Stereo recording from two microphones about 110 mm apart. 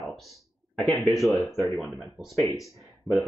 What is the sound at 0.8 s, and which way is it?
Speech, centre (ahead or behind).